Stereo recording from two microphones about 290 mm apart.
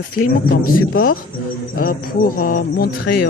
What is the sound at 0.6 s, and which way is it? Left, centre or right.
Speech, left.